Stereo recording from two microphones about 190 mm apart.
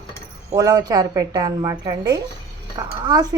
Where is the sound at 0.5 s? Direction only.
20° right (ahead or behind).